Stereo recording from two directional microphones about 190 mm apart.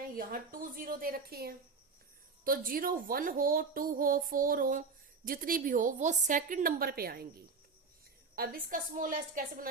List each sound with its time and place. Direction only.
0.2 s a woman's voice: 45° right (ahead or behind)